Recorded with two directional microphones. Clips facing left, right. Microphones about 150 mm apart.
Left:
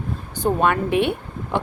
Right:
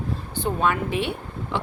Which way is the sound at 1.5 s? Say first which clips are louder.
Left 4 dB; 50° left (ahead or behind).